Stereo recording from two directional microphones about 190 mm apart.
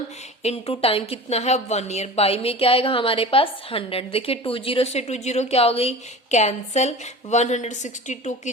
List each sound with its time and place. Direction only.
0.4 s a woman's voice: 30° left (ahead or behind)